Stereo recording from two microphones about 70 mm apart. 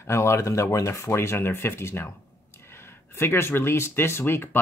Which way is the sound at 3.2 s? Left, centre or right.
Left.